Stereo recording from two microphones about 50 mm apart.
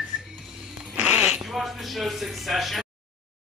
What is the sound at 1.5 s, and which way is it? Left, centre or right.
Speech, centre.